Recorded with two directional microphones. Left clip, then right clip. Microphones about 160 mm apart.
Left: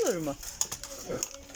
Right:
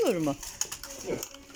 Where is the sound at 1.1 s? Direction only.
30° right (ahead or behind).